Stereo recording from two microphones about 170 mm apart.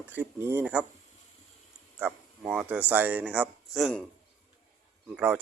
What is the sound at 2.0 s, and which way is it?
Speech, 5° right (ahead or behind).